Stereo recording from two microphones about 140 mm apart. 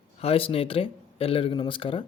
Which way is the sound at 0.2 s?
45° left (ahead or behind).